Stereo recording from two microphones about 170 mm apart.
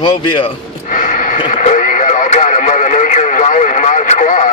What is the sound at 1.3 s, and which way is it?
Radio, 45° left (ahead or behind).